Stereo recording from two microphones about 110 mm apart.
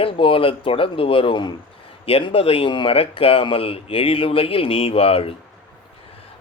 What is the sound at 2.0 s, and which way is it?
Speech, 60° left (ahead or behind).